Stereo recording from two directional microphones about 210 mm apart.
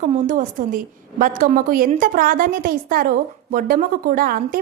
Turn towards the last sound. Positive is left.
turn(degrees=-40)  # may be behind; listen again after turning